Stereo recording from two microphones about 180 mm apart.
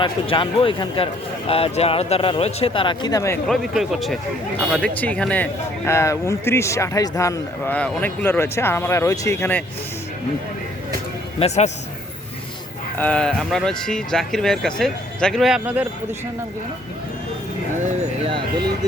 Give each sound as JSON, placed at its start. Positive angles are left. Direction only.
{"t": 0.0, "sound": "a man's voice", "side_deg": 30}
{"t": 3.5, "sound": "speech", "side_deg": 0}
{"t": 11.3, "sound": "a man's voice", "side_deg": 35}
{"t": 13.0, "sound": "speech", "side_deg": 5}
{"t": 17.8, "sound": "a sound", "side_deg": -40}